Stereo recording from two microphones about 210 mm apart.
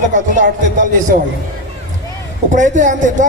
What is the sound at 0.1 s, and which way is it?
Speech, 35° right (ahead or behind).